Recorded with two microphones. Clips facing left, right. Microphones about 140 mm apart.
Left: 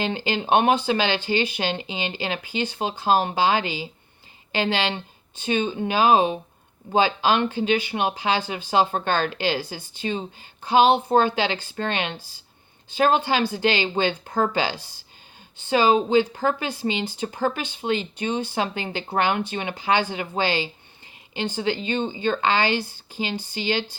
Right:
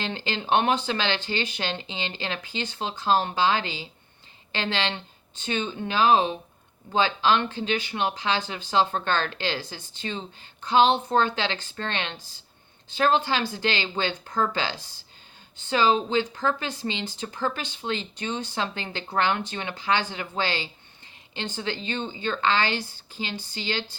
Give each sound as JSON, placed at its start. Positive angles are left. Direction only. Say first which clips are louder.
{"t": 0.0, "sound": "speech", "louder": "left 5 dB", "side_deg": 15}
{"t": 14.3, "sound": "speech", "louder": "left 3 dB", "side_deg": 40}
{"t": 14.5, "sound": "speech", "louder": "left 5 dB", "side_deg": 15}